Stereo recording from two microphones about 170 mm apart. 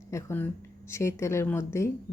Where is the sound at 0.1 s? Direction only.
15° left (ahead or behind).